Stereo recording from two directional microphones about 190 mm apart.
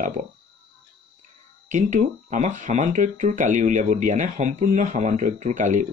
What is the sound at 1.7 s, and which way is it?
Speech, 40° right (ahead or behind).